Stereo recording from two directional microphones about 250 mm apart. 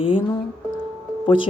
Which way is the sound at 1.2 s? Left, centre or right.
Centre.